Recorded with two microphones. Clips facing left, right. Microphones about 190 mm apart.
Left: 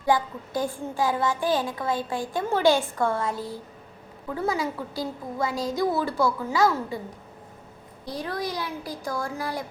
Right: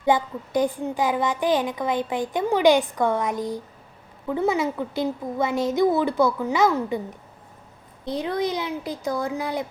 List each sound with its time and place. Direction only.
0.0 s a woman's voice: 20° right (ahead or behind)
8.0 s a woman's voice: 20° right (ahead or behind)